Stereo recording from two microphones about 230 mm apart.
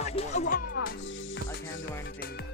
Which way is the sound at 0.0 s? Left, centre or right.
Left.